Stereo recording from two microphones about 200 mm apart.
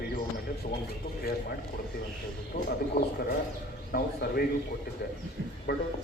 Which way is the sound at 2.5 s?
50° left (ahead or behind).